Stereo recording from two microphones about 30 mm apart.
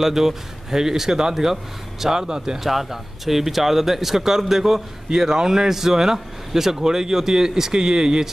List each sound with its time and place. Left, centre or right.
0.0 s speech: centre
2.1 s speech: right
2.6 s speech: centre